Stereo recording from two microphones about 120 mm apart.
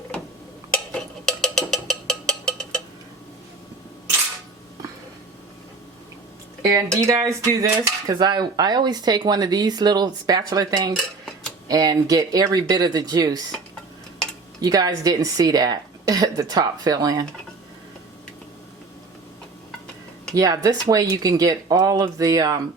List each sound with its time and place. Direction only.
0.7 s a sound: 5° left (ahead or behind)
6.9 s cutlery: 25° right (ahead or behind)
14.6 s cutlery: 30° right (ahead or behind)
20.3 s speech: 30° right (ahead or behind)
20.9 s cutlery: 30° right (ahead or behind)